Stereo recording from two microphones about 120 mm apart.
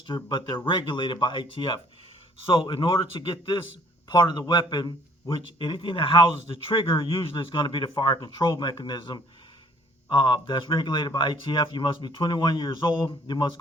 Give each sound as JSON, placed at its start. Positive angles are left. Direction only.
{"t": 0.1, "sound": "speech", "side_deg": 40}